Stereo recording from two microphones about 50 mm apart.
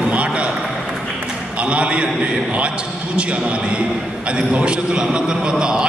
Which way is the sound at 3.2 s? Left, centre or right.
Right.